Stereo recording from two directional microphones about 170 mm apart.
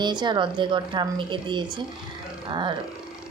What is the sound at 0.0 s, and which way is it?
A woman's voice, 25° right (ahead or behind).